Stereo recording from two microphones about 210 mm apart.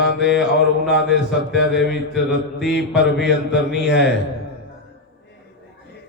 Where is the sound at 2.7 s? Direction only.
55° left (ahead or behind).